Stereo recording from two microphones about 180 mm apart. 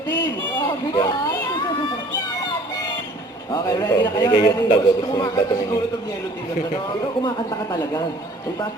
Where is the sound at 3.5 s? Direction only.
20° left (ahead or behind).